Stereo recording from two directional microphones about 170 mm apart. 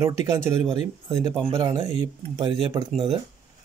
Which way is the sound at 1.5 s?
25° right (ahead or behind).